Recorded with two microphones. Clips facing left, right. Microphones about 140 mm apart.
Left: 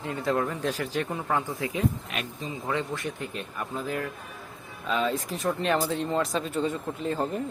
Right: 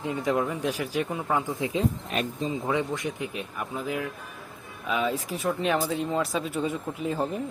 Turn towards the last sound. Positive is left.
turn(degrees=-5)  # may be behind; listen again after turning